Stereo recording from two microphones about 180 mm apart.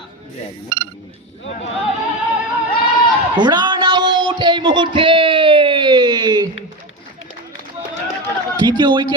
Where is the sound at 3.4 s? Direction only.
25° right (ahead or behind).